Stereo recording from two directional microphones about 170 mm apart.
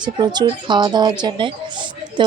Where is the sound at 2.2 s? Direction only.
30° right (ahead or behind).